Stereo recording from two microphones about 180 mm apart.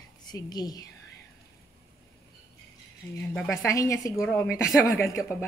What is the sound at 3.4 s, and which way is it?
Speech, 15° left (ahead or behind).